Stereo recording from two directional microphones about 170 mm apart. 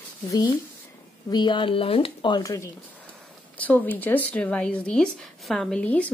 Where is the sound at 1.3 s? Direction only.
25° left (ahead or behind).